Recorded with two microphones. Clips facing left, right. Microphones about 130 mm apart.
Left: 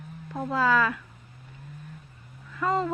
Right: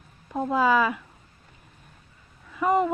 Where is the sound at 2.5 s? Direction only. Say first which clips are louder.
Right 4 dB; 15° right (ahead or behind).